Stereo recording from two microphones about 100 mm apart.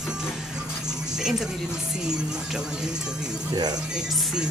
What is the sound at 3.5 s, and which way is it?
Speech, 40° right (ahead or behind).